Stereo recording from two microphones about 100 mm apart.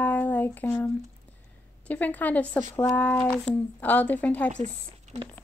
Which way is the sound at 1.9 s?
15° left (ahead or behind).